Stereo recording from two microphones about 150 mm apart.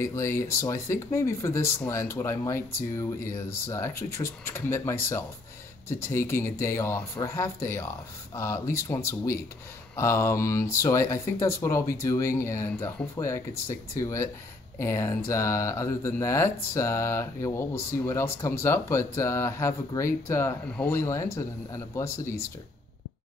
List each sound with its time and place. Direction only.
0.0 s speech: 20° left (ahead or behind)